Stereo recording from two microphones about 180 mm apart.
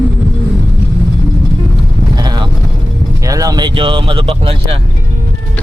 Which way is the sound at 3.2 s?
20° right (ahead or behind).